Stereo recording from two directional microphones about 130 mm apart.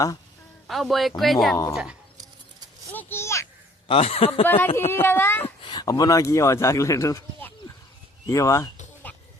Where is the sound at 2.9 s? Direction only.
15° left (ahead or behind).